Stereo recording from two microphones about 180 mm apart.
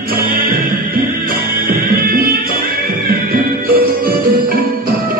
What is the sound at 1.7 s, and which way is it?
Music, 55° right (ahead or behind).